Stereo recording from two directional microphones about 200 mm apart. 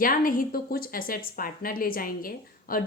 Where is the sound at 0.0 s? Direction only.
45° left (ahead or behind).